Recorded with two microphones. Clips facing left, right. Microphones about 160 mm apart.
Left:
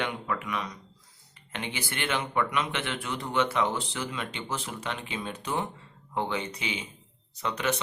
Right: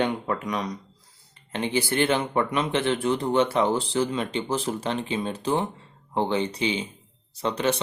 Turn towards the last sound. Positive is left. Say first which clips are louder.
# right 5 dB
turn(degrees=-30)  # may be behind; listen again after turning